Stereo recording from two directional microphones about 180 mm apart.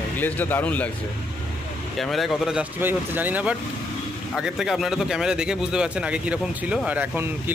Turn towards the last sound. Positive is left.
turn(degrees=-10)  # may be behind; listen again after turning